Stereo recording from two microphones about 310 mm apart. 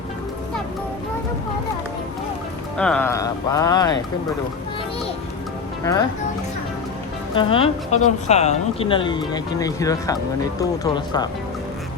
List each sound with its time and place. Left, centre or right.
2.7 s speech: centre
5.8 s speech: centre
7.3 s speech: centre